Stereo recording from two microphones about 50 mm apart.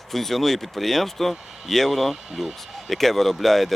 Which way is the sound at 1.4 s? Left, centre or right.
Centre.